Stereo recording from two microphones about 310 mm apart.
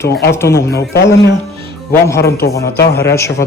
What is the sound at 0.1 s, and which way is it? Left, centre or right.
Speech, left.